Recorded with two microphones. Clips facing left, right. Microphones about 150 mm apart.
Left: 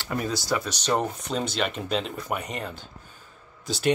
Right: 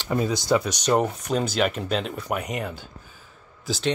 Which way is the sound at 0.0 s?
20° right (ahead or behind).